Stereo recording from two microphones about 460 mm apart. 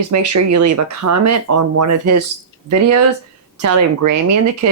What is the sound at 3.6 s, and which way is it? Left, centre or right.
Speech, right.